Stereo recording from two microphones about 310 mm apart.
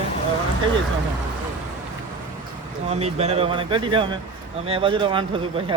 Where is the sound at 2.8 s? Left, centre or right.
Right.